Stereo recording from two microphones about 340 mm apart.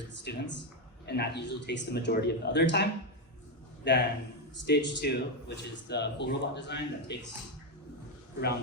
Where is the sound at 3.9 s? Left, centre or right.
Left.